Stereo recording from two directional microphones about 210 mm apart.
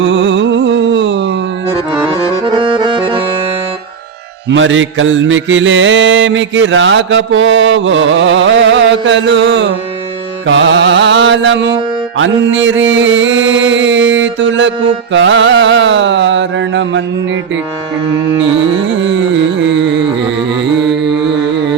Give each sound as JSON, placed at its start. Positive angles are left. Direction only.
{"t": 0.0, "sound": "music", "side_deg": -60}
{"t": 2.2, "sound": "accordion", "side_deg": -25}
{"t": 4.4, "sound": "mantra", "side_deg": -65}
{"t": 19.0, "sound": "carnatic music", "side_deg": -60}